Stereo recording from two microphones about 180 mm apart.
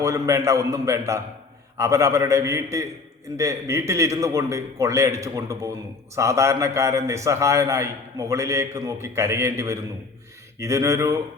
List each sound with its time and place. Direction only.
0.0 s a man's voice: 15° right (ahead or behind)